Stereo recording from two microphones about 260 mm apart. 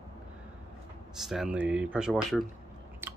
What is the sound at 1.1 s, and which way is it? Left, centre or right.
Speech, centre.